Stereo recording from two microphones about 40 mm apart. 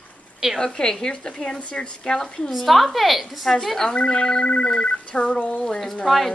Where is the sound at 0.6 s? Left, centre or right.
Centre.